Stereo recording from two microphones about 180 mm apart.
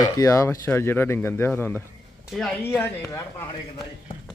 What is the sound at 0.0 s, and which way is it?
Speech, 20° left (ahead or behind).